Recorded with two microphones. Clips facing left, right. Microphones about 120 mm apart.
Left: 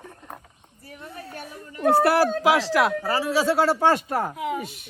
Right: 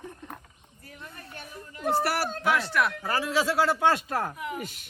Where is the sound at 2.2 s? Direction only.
90° left.